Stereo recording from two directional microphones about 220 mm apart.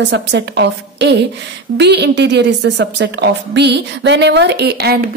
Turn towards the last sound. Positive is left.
turn(degrees=-45)  # may be behind; listen again after turning